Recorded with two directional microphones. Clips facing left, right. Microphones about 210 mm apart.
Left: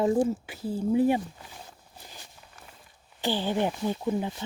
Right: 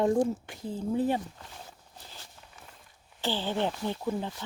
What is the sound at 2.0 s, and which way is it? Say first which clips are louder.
Walk: left 2 dB; 15° left (ahead or behind).